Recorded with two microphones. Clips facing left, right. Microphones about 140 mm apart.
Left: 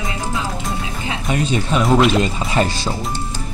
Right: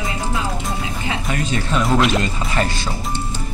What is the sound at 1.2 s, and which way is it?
Speech, 20° left (ahead or behind).